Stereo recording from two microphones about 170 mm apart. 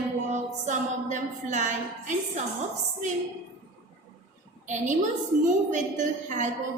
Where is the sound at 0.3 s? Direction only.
45° right (ahead or behind).